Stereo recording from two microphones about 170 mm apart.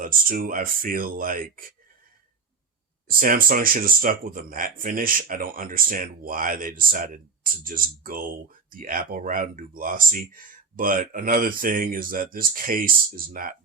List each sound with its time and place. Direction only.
0.0 s speech: 55° right (ahead or behind)
3.1 s speech: 55° right (ahead or behind)